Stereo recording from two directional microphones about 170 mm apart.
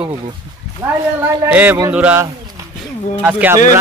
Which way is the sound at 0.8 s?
15° right (ahead or behind).